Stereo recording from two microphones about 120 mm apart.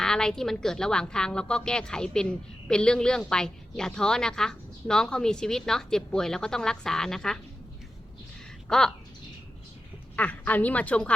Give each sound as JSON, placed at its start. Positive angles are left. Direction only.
{"t": 0.0, "sound": "a woman's voice", "side_deg": 5}
{"t": 8.6, "sound": "speech", "side_deg": 5}
{"t": 10.2, "sound": "speech", "side_deg": 15}